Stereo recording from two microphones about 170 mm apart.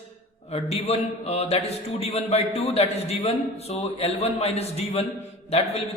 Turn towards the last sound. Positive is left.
turn(degrees=35)  # may be behind; listen again after turning